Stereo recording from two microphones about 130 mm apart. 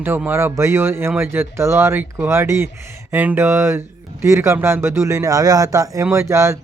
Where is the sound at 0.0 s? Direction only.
15° right (ahead or behind).